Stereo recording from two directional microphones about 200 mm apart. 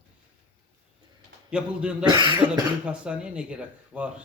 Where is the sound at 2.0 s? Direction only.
20° right (ahead or behind).